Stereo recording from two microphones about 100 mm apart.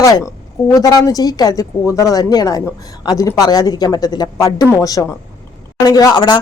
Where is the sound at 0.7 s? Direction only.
35° left (ahead or behind).